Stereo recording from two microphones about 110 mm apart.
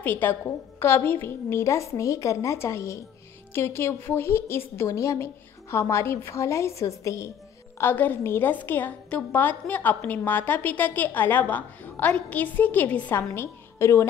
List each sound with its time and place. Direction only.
0.0 s a woman's voice: 15° left (ahead or behind)
13.3 s a woman's voice: 25° left (ahead or behind)